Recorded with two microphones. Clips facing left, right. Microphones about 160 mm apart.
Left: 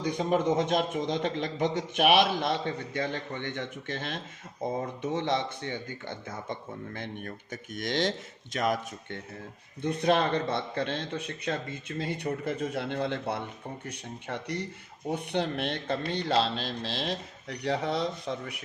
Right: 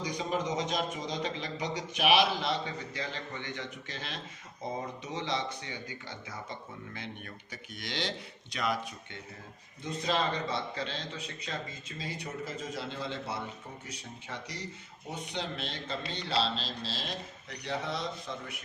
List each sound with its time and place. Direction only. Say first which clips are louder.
0.0 s a man's voice: left 6 dB; 55° left (ahead or behind)
9.8 s a man's voice: left 6 dB; 60° left (ahead or behind)
17.7 s a man's voice: left 6 dB; 60° left (ahead or behind)